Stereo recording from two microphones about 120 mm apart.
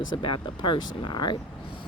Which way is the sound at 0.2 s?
40° left (ahead or behind).